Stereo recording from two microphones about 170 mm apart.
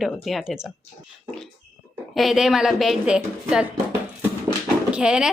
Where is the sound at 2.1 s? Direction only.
Centre (ahead or behind).